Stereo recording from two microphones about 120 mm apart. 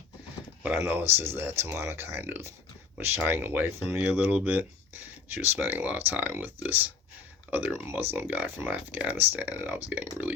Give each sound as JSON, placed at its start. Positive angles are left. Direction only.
{"t": 0.8, "sound": "speech", "side_deg": -20}